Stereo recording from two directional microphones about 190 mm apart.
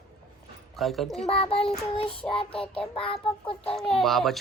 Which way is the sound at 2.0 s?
30° left (ahead or behind).